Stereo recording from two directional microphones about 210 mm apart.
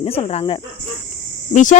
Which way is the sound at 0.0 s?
30° left (ahead or behind).